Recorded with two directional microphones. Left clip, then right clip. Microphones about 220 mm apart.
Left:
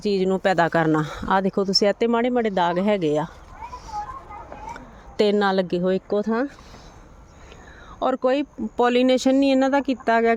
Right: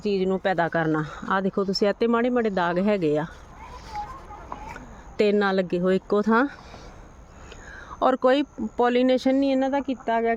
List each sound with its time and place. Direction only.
0.0 s speech: 15° left (ahead or behind)
5.1 s speech: 5° left (ahead or behind)
7.9 s speech: 5° right (ahead or behind)
8.7 s speech: 10° left (ahead or behind)